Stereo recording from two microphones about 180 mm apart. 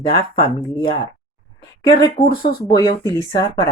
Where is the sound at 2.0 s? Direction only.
25° left (ahead or behind).